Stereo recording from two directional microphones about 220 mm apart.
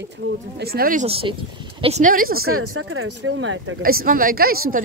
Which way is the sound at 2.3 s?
75° right (ahead or behind).